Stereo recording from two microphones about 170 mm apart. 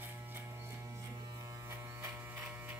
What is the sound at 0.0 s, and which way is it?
Electric shaver, 15° right (ahead or behind).